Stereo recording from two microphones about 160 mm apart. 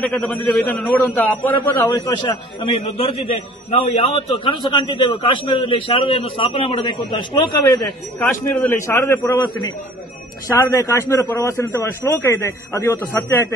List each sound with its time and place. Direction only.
0.0 s a man's voice: 10° left (ahead or behind)
2.6 s a man's voice: 40° left (ahead or behind)
8.2 s a man's voice: 15° left (ahead or behind)
10.6 s a man's voice: 20° left (ahead or behind)